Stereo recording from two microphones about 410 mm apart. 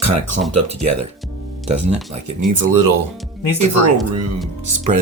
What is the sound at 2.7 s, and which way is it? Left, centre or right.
Speech, right.